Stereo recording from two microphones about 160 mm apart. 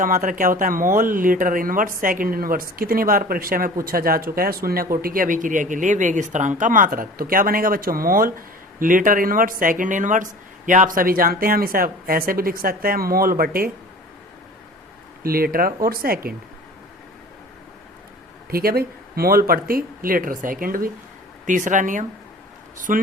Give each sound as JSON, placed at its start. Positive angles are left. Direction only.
{"t": 0.0, "sound": "speech", "side_deg": -55}
{"t": 15.2, "sound": "speech", "side_deg": -65}
{"t": 18.5, "sound": "speech", "side_deg": -70}